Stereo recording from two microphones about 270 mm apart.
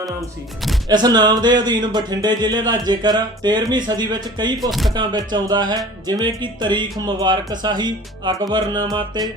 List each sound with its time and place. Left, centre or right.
0.2 s speech: centre
0.9 s speech: centre
4.7 s speech: centre
4.9 s speech: centre